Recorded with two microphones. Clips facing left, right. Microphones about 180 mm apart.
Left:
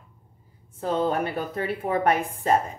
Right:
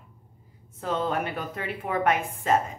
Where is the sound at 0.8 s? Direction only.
35° left (ahead or behind).